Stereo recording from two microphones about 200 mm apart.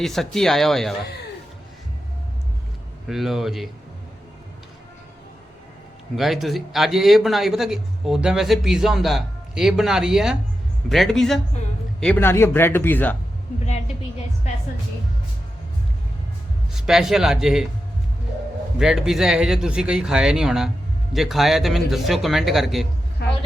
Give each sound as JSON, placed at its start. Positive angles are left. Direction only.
{"t": 0.0, "sound": "speech", "side_deg": 0}
{"t": 3.1, "sound": "speech", "side_deg": 0}
{"t": 6.1, "sound": "speech", "side_deg": 0}
{"t": 16.7, "sound": "speech", "side_deg": 0}
{"t": 18.8, "sound": "speech", "side_deg": 0}
{"t": 23.2, "sound": "a sound", "side_deg": 55}